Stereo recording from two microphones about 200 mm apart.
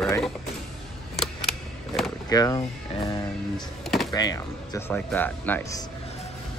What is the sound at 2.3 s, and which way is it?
Speech, 20° left (ahead or behind).